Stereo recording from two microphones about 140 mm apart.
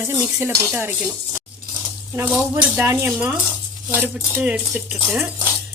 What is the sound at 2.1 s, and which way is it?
Speech, 15° right (ahead or behind).